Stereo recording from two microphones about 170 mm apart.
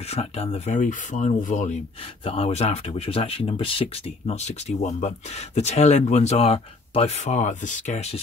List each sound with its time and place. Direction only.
0.1 s speech: 35° left (ahead or behind)
2.2 s speech: 35° left (ahead or behind)